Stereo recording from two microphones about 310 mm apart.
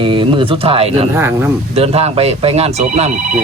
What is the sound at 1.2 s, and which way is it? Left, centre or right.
Speech, centre.